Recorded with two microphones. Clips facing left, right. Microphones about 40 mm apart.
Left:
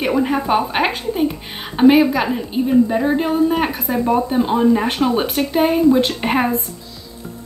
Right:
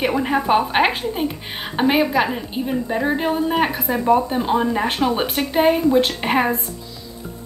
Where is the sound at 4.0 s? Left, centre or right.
Centre.